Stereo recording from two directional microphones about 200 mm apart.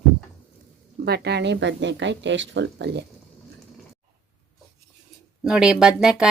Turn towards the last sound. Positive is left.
turn(degrees=-5)  # may be behind; listen again after turning